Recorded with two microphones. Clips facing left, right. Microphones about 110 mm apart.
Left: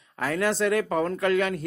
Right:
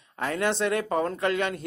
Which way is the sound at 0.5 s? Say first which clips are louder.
Left 2 dB; 25° right (ahead or behind).